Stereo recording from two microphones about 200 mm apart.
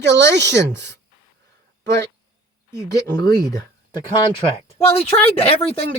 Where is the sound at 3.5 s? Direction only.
20° left (ahead or behind).